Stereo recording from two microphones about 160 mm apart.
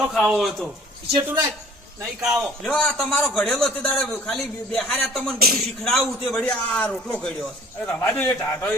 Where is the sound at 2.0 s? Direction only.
5° right (ahead or behind).